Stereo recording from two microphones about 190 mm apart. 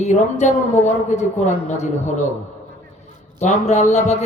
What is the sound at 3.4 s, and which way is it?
Speech, 40° left (ahead or behind).